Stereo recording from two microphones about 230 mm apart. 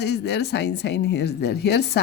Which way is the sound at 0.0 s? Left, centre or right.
Left.